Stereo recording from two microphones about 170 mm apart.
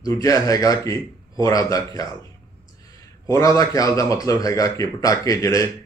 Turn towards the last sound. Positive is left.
turn(degrees=20)  # may be behind; listen again after turning